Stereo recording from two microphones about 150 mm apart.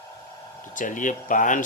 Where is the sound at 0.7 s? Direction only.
60° left (ahead or behind).